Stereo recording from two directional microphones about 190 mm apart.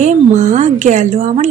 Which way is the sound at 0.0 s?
40° right (ahead or behind).